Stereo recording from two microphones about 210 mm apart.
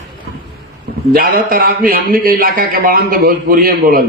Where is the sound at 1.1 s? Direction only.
45° right (ahead or behind).